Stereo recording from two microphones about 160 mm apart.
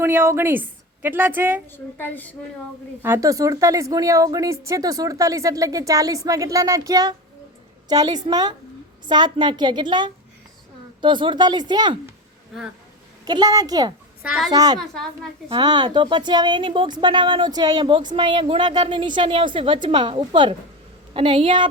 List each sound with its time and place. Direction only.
0.0 s a woman's voice: 15° right (ahead or behind)
1.7 s a woman's voice: 10° left (ahead or behind)
3.0 s a woman's voice: 15° right (ahead or behind)
13.2 s a woman's voice: 25° right (ahead or behind)